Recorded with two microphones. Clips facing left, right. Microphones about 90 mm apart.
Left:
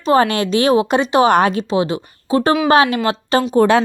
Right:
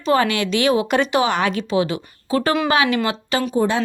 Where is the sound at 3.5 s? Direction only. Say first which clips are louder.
Left 7 dB; 75° left (ahead or behind).